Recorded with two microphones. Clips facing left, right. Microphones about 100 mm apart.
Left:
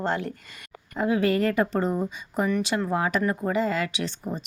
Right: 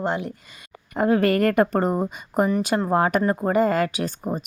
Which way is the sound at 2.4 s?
40° right (ahead or behind).